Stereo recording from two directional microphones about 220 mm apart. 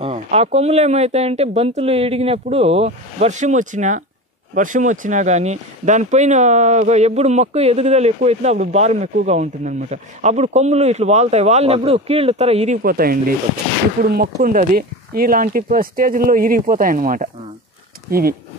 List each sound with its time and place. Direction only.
0.0 s speech: 30° right (ahead or behind)